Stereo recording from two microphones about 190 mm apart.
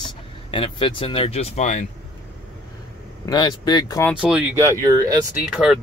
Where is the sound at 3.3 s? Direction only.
20° left (ahead or behind).